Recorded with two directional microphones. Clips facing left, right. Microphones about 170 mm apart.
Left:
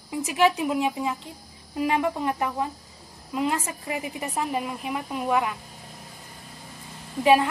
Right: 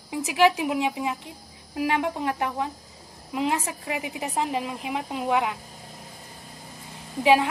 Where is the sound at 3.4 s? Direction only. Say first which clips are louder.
Even; 15° right (ahead or behind).